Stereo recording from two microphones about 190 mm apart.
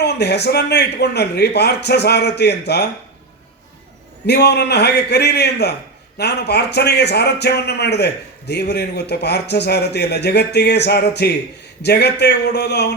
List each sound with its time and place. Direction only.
0.0 s a man's voice: 60° left (ahead or behind)
4.3 s a man's voice: 60° left (ahead or behind)